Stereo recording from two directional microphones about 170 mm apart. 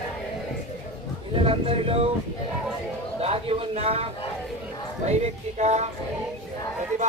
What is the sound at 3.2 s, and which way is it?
Speech, 35° right (ahead or behind).